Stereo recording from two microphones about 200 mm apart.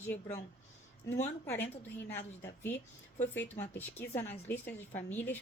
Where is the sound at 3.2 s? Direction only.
10° left (ahead or behind).